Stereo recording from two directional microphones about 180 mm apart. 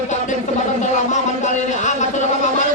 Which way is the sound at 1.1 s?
40° left (ahead or behind).